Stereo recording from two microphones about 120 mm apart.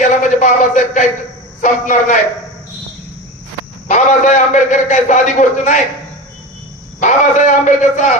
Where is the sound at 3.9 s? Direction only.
90° left.